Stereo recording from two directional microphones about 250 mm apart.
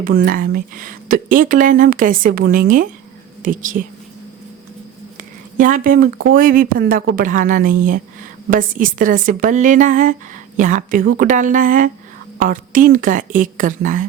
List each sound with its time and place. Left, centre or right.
0.0 s speech: right
5.5 s speech: right